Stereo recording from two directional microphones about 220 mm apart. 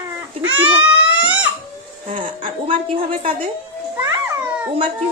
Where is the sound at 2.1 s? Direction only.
25° right (ahead or behind).